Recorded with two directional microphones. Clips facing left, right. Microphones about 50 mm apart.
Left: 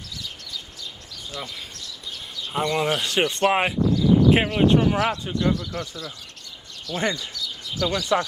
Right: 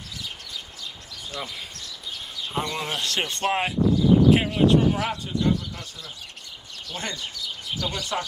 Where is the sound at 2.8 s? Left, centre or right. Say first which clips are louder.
Left 5 dB; left.